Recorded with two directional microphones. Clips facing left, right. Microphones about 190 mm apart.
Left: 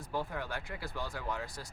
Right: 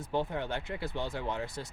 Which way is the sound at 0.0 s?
25° right (ahead or behind).